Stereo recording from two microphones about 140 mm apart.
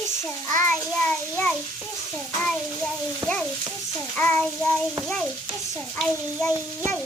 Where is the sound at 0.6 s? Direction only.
10° left (ahead or behind).